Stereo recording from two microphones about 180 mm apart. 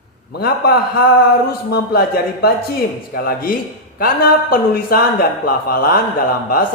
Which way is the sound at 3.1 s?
55° left (ahead or behind).